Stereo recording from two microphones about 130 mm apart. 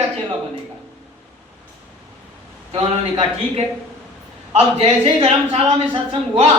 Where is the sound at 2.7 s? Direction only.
50° right (ahead or behind).